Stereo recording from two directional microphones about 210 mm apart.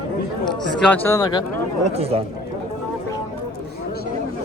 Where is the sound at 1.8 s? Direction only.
30° right (ahead or behind).